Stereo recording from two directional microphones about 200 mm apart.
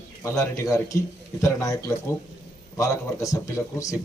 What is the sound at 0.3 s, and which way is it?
A man's voice, 15° left (ahead or behind).